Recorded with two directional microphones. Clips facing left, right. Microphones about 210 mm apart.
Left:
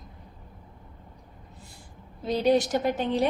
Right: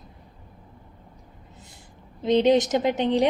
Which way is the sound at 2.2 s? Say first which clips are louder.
Right 4 dB; 20° right (ahead or behind).